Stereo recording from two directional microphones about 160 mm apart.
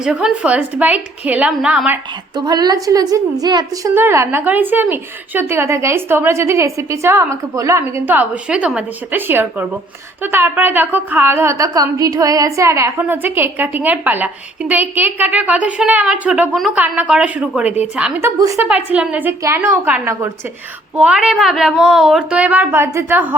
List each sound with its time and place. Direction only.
0.0 s a woman's voice: 5° right (ahead or behind)
2.3 s a woman's voice: 25° right (ahead or behind); by 18.3 s 5° right (ahead or behind)
18.3 s a woman's voice: 20° right (ahead or behind)
18.7 s a woman's voice: 10° right (ahead or behind)